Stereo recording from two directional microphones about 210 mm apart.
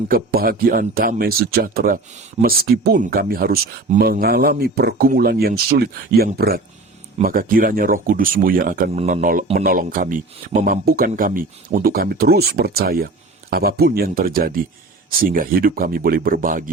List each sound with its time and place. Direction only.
0.1 s speech: 45° right (ahead or behind)
8.9 s speech: 30° right (ahead or behind)